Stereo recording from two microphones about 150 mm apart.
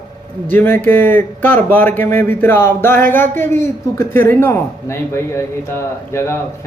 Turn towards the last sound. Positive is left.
turn(degrees=20)  # may be behind; listen again after turning